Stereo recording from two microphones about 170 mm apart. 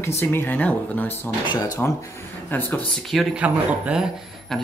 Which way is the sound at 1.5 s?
20° left (ahead or behind).